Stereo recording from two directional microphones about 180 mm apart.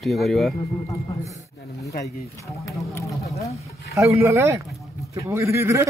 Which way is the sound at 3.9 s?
15° right (ahead or behind).